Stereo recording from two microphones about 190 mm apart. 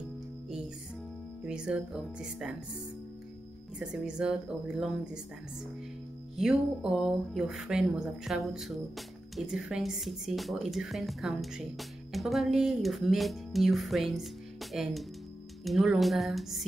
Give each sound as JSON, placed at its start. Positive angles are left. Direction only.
{"t": 1.4, "sound": "speech", "side_deg": -5}
{"t": 3.8, "sound": "speech", "side_deg": -5}
{"t": 6.3, "sound": "speech", "side_deg": -5}